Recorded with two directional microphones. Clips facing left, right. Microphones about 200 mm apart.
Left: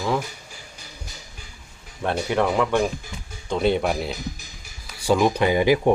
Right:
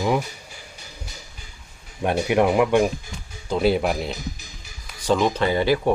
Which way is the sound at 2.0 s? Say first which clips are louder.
Right 3 dB; 15° right (ahead or behind).